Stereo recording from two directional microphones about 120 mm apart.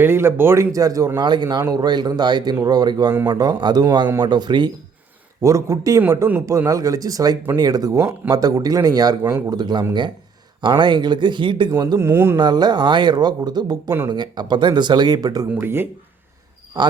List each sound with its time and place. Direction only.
0.0 s speech: 20° right (ahead or behind); by 4.7 s 40° right (ahead or behind)
5.4 s speech: 25° right (ahead or behind)
6.7 s speech: 30° right (ahead or behind)
11.7 s speech: 30° right (ahead or behind)
11.9 s speech: 20° right (ahead or behind)
12.4 s speech: 35° right (ahead or behind)
15.6 s speech: 20° right (ahead or behind)